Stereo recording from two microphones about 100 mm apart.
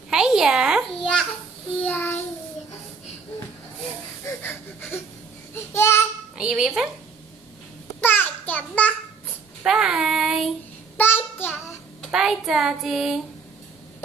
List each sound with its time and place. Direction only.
0.1 s a sound: 5° right (ahead or behind)
1.8 s child singing: 15° left (ahead or behind)
4.2 s a sound: 25° left (ahead or behind)
5.5 s a child's voice: 25° left (ahead or behind)
6.3 s speech: 10° right (ahead or behind)
8.0 s a sound: 20° left (ahead or behind)
9.7 s speech: 5° right (ahead or behind)
11.0 s child singing: 20° left (ahead or behind)
12.1 s speech: 5° right (ahead or behind)